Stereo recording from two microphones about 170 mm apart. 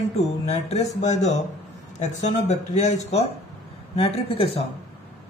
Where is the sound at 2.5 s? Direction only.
40° left (ahead or behind).